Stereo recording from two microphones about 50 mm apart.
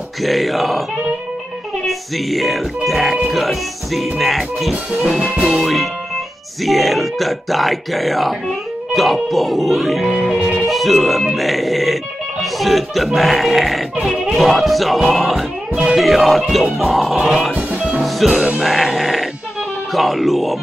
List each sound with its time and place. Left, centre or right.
0.2 s speech: centre
1.9 s speech: centre
5.3 s music: centre
5.6 s speech: centre
17.5 s music: right
18.2 s speech: centre